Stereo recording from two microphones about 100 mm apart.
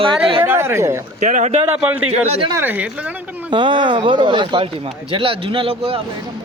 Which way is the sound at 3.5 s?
55° right (ahead or behind).